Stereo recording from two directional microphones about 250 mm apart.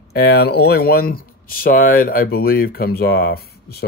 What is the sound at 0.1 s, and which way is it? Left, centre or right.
Speech, left.